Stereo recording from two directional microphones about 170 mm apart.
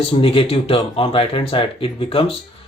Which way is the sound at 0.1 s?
35° left (ahead or behind).